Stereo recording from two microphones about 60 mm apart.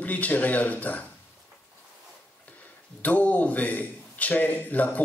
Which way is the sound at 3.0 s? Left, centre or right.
Left.